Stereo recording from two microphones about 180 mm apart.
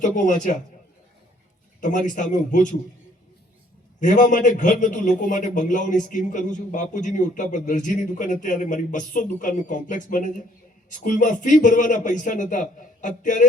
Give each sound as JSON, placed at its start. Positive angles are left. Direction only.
{"t": 0.0, "sound": "a man's voice", "side_deg": 45}
{"t": 1.8, "sound": "a man's voice", "side_deg": 45}
{"t": 4.0, "sound": "a man's voice", "side_deg": 45}